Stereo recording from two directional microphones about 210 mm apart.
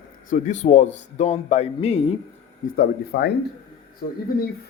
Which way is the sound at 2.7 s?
50° left (ahead or behind).